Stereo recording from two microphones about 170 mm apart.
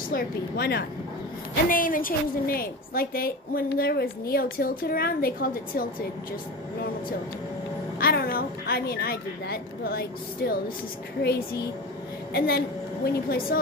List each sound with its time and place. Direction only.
0.1 s a woman's voice: 70° left (ahead or behind)
1.7 s a woman's voice: 55° left (ahead or behind)
8.0 s a woman's voice: 65° left (ahead or behind)